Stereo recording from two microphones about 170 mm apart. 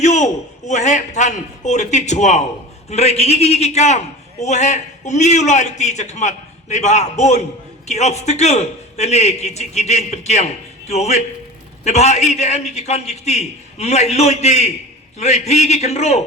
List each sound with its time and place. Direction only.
0.0 s a man's voice: 40° left (ahead or behind)